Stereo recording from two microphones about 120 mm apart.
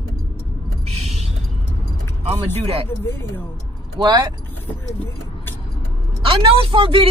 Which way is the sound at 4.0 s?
40° right (ahead or behind).